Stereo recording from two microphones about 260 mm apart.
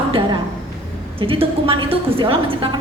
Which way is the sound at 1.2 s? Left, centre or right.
Right.